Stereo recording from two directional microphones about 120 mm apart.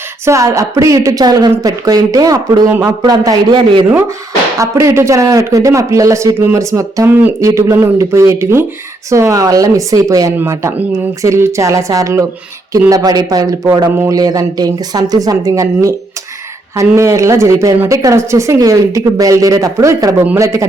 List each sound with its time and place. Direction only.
0.3 s speech: 25° right (ahead or behind)
2.6 s speech: 20° right (ahead or behind)
3.0 s speech: 35° right (ahead or behind)
4.6 s speech: 25° right (ahead or behind)